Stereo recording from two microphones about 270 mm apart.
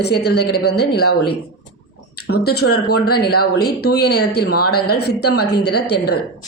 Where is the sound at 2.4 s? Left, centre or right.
Left.